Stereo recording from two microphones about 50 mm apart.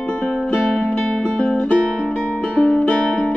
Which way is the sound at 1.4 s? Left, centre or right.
Left.